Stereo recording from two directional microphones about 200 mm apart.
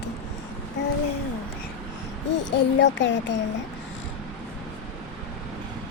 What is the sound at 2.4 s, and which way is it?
Speech, 65° left (ahead or behind).